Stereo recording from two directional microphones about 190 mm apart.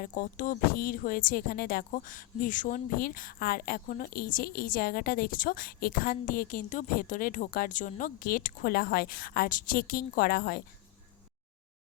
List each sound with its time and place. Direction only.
0.0 s speech: 45° left (ahead or behind)